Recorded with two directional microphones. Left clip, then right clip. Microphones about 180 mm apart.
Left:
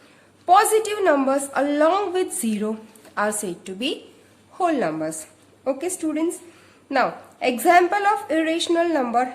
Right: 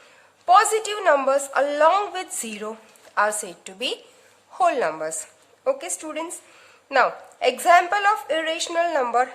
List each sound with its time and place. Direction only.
0.4 s a woman's voice: 20° right (ahead or behind)